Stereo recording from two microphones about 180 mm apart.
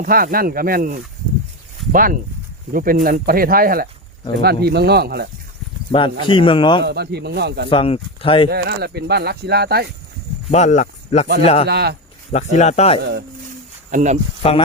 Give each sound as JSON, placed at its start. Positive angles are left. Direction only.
{"t": 0.0, "sound": "speech", "side_deg": -55}
{"t": 5.9, "sound": "speech", "side_deg": 25}
{"t": 6.8, "sound": "speech", "side_deg": -65}
{"t": 7.7, "sound": "speech", "side_deg": 30}
{"t": 8.4, "sound": "speech", "side_deg": -60}
{"t": 10.5, "sound": "speech", "side_deg": 40}
{"t": 11.7, "sound": "speech", "side_deg": -65}
{"t": 12.3, "sound": "speech", "side_deg": 40}
{"t": 13.9, "sound": "speech", "side_deg": -40}
{"t": 14.4, "sound": "speech", "side_deg": 30}